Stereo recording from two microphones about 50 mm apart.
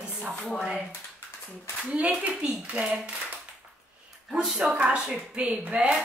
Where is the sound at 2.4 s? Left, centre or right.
Right.